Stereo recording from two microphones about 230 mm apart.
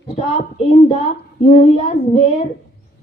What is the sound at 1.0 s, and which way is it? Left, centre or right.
A child's voice, left.